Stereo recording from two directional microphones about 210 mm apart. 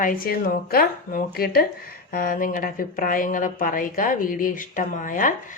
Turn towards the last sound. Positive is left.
turn(degrees=40)  # may be behind; listen again after turning